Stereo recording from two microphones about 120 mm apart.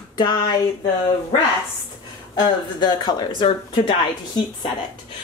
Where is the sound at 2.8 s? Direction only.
35° left (ahead or behind).